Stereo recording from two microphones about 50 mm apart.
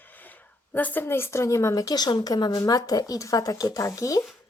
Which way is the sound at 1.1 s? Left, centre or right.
Left.